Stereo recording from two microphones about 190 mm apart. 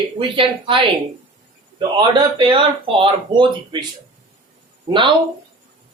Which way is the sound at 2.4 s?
25° right (ahead or behind).